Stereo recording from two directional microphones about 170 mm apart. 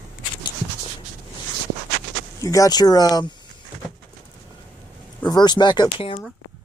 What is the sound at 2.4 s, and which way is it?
Speech, 20° left (ahead or behind).